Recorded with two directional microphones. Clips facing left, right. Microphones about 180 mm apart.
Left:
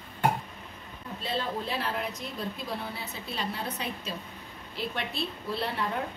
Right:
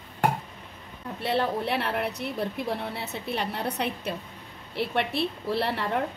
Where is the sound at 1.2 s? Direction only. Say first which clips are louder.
Right 6 dB; 70° right (ahead or behind).